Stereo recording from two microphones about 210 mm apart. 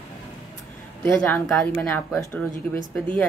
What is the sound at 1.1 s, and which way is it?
A man's voice, 10° left (ahead or behind).